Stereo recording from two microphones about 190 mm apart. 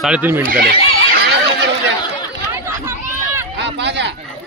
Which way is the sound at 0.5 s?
55° right (ahead or behind).